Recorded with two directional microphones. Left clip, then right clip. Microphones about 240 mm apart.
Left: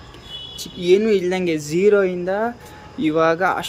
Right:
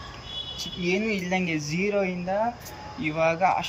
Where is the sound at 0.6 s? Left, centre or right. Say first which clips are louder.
Left 11 dB; centre.